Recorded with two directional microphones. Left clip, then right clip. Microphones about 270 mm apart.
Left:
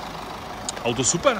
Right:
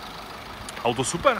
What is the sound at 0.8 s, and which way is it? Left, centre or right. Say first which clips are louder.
Speech: left 1 dB; centre.